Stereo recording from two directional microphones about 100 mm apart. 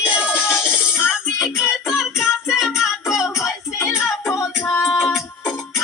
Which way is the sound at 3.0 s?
30° left (ahead or behind).